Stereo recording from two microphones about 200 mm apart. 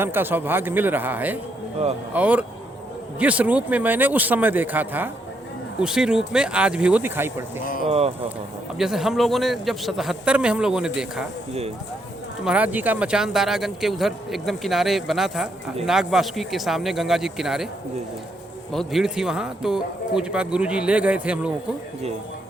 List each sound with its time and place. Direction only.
0.0 s speech: 10° right (ahead or behind)
7.9 s speech: 30° right (ahead or behind)
8.8 s speech: centre (ahead or behind)
12.5 s speech: 10° right (ahead or behind)
18.7 s speech: centre (ahead or behind)